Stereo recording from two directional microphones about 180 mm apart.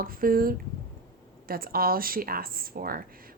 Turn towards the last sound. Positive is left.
turn(degrees=-55)  # may be behind; listen again after turning